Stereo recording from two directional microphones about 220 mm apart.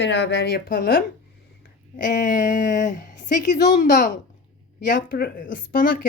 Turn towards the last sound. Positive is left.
turn(degrees=40)  # may be behind; listen again after turning